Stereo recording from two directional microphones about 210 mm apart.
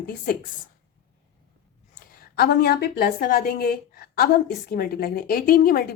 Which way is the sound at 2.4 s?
50° left (ahead or behind).